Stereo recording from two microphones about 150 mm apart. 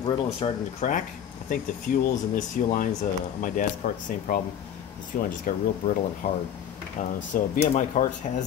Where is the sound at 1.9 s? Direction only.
65° left (ahead or behind).